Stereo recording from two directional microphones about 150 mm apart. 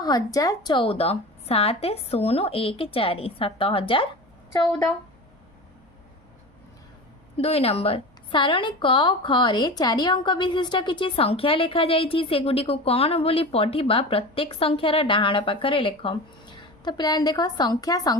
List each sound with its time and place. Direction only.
0.0 s a woman's voice: 25° left (ahead or behind)
7.3 s a woman's voice: 40° left (ahead or behind); by 18.2 s 25° left (ahead or behind)